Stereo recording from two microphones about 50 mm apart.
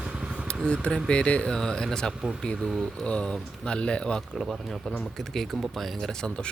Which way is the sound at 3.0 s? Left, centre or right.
Left.